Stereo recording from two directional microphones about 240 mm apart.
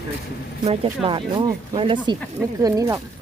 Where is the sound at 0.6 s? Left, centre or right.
Right.